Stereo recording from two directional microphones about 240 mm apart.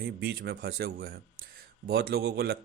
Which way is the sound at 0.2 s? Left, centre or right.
Right.